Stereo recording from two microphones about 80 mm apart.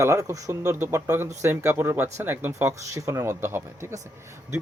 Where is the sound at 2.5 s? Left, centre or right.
Right.